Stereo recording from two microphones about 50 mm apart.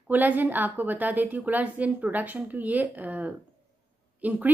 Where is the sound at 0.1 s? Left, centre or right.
Right.